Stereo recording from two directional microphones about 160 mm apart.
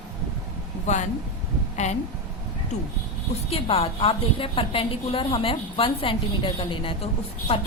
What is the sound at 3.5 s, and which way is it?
A woman's voice, 40° left (ahead or behind).